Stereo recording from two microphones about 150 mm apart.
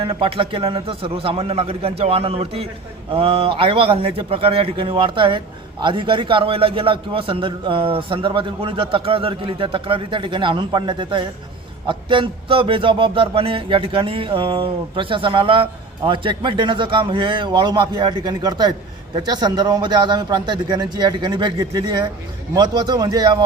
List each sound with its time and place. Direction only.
0.0 s a man's voice: 35° right (ahead or behind)